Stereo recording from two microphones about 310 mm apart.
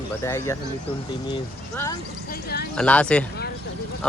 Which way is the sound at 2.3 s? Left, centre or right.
Left.